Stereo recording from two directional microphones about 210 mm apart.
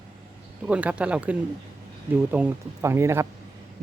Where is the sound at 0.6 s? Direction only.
5° right (ahead or behind).